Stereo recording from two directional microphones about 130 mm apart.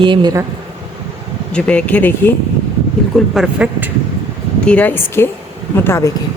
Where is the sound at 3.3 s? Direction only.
5° right (ahead or behind).